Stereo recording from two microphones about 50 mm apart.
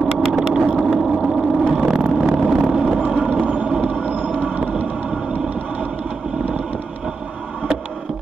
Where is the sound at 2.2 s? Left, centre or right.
Right.